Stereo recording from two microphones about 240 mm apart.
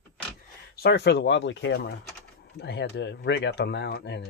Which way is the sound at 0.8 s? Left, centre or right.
Left.